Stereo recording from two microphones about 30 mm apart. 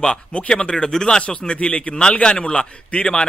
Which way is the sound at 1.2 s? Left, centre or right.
Left.